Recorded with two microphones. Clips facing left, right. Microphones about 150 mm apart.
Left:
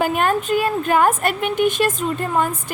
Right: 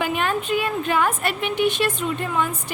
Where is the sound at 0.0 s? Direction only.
45° left (ahead or behind).